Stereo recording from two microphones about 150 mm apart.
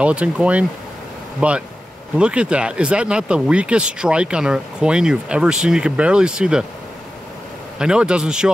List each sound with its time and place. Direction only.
0.0 s speech: 10° right (ahead or behind)
7.8 s a man's voice: 5° right (ahead or behind)